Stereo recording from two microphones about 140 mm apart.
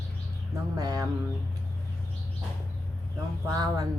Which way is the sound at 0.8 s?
25° right (ahead or behind).